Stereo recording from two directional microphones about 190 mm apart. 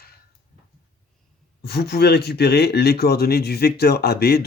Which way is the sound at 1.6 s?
60° left (ahead or behind).